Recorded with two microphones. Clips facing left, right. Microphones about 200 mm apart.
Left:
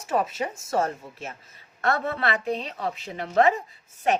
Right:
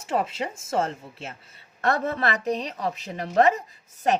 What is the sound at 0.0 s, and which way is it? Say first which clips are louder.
Speech: left 1 dB; 25° right (ahead or behind).